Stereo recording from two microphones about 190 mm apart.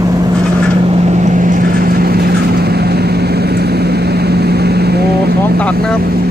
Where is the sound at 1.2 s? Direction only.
40° right (ahead or behind); by 5.3 s 55° right (ahead or behind).